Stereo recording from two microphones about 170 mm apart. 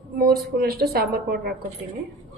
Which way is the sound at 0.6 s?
65° right (ahead or behind).